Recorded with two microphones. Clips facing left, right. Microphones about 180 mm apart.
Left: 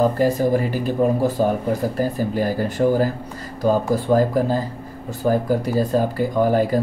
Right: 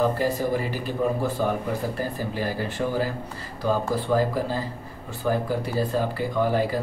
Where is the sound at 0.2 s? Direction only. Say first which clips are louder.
Left 6 dB; 45° left (ahead or behind).